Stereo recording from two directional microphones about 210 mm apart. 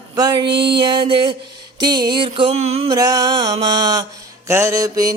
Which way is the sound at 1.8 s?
20° right (ahead or behind).